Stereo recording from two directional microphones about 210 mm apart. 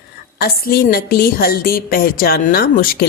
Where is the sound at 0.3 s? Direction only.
45° left (ahead or behind).